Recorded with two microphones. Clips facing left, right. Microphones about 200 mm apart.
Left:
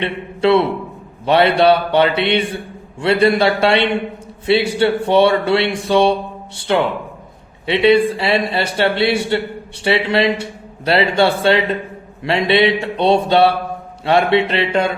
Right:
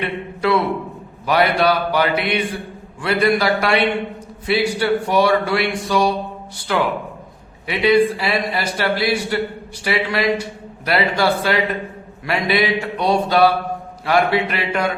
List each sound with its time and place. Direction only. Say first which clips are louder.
0.0 s a man's voice: left 4 dB; 25° left (ahead or behind)